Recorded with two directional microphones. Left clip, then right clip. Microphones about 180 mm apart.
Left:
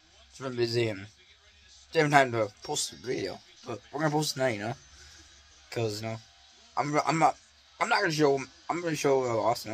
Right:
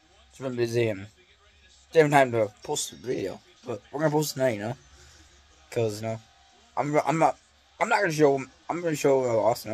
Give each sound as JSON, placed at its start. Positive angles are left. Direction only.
{"t": 0.4, "sound": "a man's voice", "side_deg": -15}